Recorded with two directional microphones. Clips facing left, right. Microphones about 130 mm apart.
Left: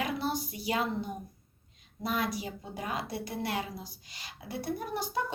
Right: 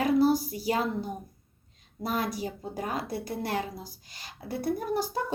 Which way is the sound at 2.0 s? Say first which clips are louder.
Right 2 dB; 40° right (ahead or behind).